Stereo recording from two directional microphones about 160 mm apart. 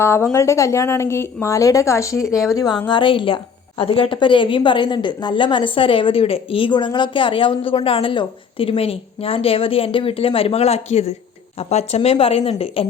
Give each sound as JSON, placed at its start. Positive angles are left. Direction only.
{"t": 0.0, "sound": "a woman's voice", "side_deg": 15}